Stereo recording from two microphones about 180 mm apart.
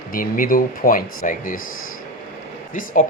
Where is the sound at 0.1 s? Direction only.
50° left (ahead or behind).